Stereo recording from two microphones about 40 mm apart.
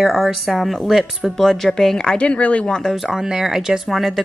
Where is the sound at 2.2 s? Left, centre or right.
Left.